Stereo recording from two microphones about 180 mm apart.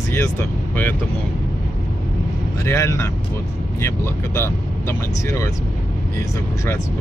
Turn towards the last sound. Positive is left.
turn(degrees=15)  # may be behind; listen again after turning